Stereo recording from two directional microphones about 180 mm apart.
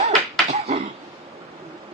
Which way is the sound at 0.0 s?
40° right (ahead or behind).